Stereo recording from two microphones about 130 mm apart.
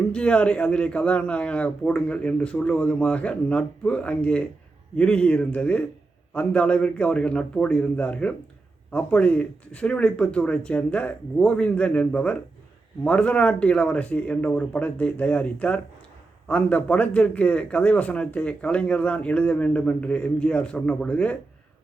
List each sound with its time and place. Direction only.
0.1 s a man's voice: 10° left (ahead or behind)